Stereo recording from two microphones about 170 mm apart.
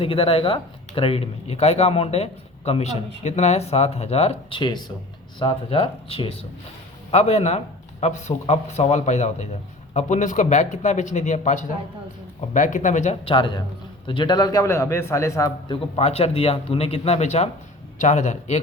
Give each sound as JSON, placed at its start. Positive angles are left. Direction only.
{"t": 0.0, "sound": "a man's voice", "side_deg": 35}
{"t": 13.2, "sound": "a man's voice", "side_deg": 30}